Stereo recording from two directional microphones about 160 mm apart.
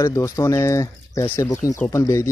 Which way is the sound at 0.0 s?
20° left (ahead or behind).